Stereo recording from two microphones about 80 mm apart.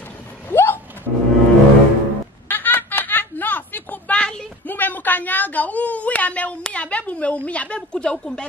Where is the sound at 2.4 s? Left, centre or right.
Left.